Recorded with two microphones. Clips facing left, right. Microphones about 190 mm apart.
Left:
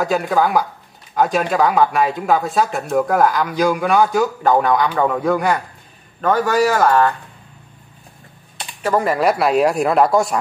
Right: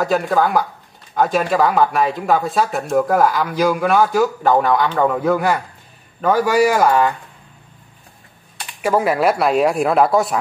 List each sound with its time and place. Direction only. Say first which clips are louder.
0.0 s speech: even; centre (ahead or behind)
8.8 s speech: right 1 dB; 5° right (ahead or behind)